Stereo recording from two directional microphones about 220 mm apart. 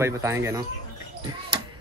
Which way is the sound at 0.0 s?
10° right (ahead or behind).